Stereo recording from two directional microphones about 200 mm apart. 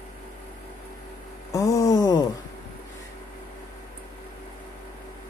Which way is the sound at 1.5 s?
15° left (ahead or behind).